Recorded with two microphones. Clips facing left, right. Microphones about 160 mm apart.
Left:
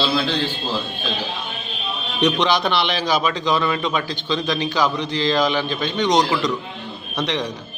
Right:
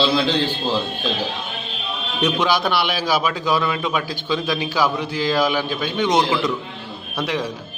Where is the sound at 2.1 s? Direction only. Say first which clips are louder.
Left 1 dB; 5° right (ahead or behind).